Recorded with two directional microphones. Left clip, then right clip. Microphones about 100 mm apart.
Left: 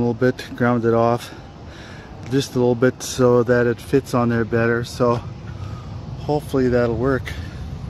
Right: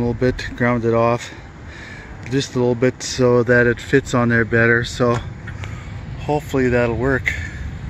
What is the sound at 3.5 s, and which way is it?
Speech, 20° right (ahead or behind).